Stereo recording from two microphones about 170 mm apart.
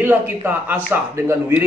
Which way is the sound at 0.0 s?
10° right (ahead or behind).